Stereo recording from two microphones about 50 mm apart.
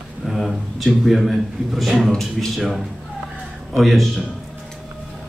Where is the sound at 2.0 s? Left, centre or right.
Centre.